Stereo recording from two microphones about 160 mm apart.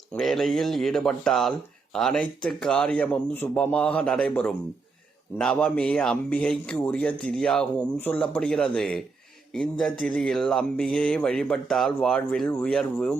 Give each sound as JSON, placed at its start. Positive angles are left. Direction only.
{"t": 0.1, "sound": "speech", "side_deg": 0}